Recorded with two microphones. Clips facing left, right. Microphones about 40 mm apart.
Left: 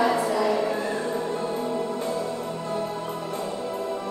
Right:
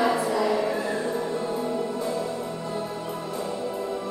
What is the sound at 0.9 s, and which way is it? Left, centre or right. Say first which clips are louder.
Music: even; left.